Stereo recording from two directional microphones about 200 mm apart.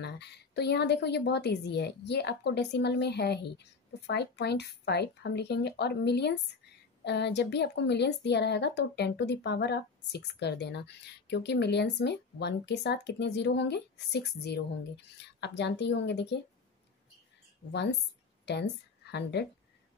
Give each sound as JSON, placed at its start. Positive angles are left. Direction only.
{"t": 0.0, "sound": "a woman's voice", "side_deg": 55}
{"t": 17.6, "sound": "a woman's voice", "side_deg": 60}